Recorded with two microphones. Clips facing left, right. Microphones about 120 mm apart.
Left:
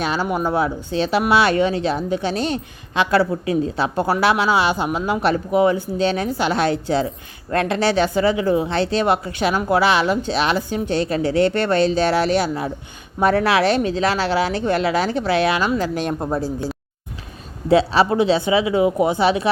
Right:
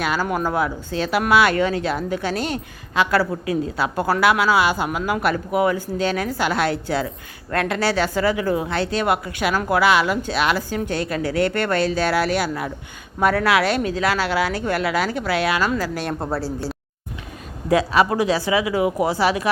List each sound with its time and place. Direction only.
0.0 s speech: 25° left (ahead or behind)
17.7 s speech: 30° left (ahead or behind)